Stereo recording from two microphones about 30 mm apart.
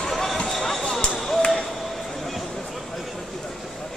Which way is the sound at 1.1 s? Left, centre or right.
Centre.